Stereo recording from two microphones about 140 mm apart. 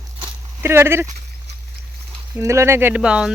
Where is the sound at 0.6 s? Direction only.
20° right (ahead or behind).